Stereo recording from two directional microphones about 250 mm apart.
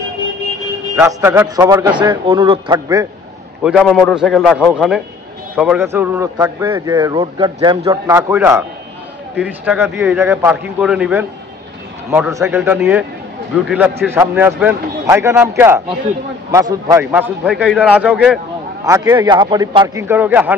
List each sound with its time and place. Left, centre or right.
0.9 s a man's voice: centre
3.6 s a man's voice: centre
18.9 s a man's voice: centre